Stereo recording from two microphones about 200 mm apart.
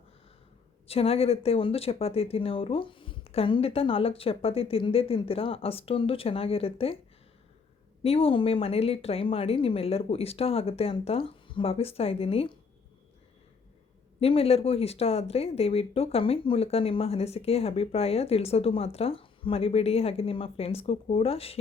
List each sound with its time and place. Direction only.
0.9 s speech: 30° left (ahead or behind)
8.0 s speech: 30° left (ahead or behind)
14.2 s speech: 30° left (ahead or behind)